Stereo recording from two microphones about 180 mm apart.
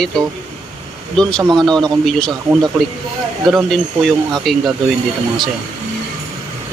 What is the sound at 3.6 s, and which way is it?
Speech, centre (ahead or behind).